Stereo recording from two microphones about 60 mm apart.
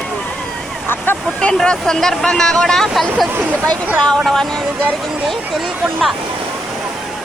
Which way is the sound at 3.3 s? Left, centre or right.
Right.